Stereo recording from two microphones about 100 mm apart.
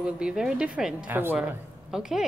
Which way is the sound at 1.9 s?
5° right (ahead or behind).